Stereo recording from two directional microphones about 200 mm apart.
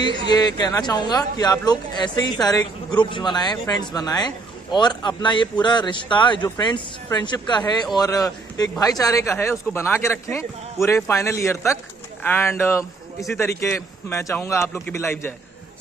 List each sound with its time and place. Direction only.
0.4 s speech: 20° left (ahead or behind)